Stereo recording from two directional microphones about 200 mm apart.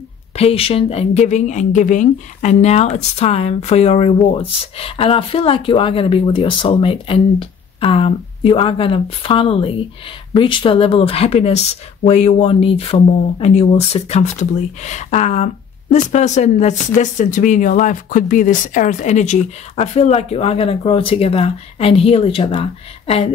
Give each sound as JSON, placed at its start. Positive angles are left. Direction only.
{"t": 0.4, "sound": "speech", "side_deg": 30}